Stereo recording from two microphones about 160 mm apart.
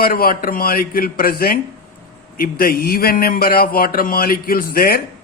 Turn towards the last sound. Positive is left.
turn(degrees=65)  # may be behind; listen again after turning